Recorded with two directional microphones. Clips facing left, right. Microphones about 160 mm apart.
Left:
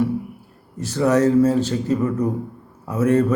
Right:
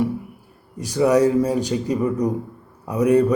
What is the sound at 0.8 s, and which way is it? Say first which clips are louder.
A man's voice: right 1 dB; 15° right (ahead or behind).